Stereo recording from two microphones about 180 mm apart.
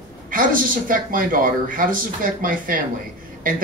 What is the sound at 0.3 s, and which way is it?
A man's voice, 50° right (ahead or behind).